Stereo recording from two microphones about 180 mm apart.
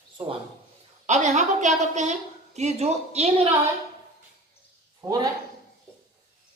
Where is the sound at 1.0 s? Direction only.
40° right (ahead or behind).